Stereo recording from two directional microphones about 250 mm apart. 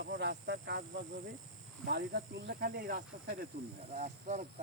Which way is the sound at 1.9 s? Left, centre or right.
Right.